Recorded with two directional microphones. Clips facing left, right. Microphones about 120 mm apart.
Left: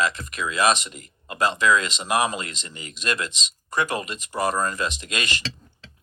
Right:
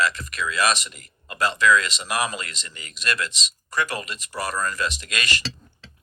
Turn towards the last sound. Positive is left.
turn(degrees=20)  # may be behind; listen again after turning